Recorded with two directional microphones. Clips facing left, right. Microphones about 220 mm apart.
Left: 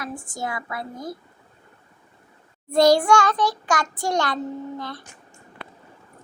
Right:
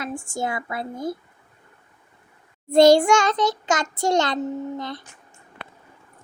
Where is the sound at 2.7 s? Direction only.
25° right (ahead or behind).